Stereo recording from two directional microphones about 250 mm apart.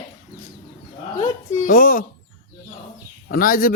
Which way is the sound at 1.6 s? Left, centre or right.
Left.